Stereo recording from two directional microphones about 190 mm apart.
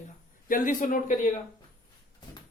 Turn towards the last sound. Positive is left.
turn(degrees=45)  # may be behind; listen again after turning